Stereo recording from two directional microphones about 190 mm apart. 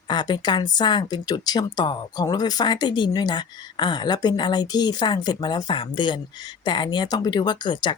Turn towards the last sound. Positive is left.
turn(degrees=25)  # may be behind; listen again after turning